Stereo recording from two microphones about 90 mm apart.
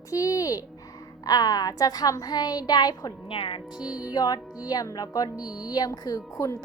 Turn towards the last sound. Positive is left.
turn(degrees=40)  # may be behind; listen again after turning